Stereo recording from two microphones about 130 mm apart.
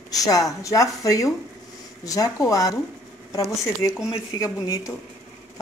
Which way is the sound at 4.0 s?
25° left (ahead or behind).